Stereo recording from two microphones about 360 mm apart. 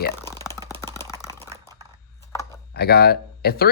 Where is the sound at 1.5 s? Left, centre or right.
Centre.